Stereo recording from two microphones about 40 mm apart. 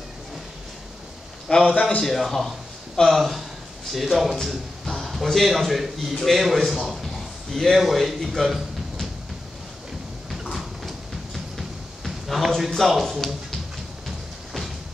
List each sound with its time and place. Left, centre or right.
1.7 s a man's voice: left
2.0 s a man's voice: centre
10.4 s a sound: centre
12.7 s speech: centre